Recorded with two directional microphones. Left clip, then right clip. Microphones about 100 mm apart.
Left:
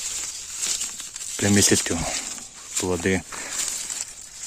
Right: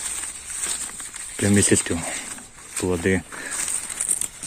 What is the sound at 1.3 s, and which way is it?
Speech, 30° left (ahead or behind).